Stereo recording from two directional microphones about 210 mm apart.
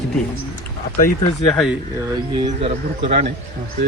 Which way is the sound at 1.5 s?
Centre (ahead or behind).